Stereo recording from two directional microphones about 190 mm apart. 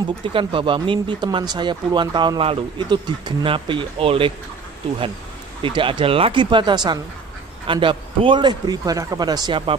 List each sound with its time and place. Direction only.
0.2 s speech: 25° right (ahead or behind)
5.6 s speech: 25° right (ahead or behind)